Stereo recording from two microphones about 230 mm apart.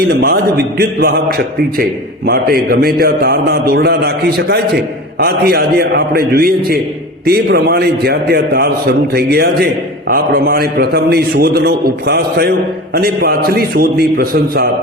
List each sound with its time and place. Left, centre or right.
0.0 s a man's voice: right